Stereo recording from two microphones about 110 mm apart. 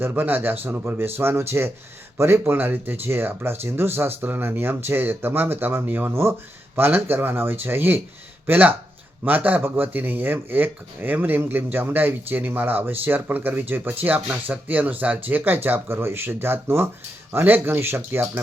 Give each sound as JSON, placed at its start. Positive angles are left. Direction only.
{"t": 0.0, "sound": "speech", "side_deg": -15}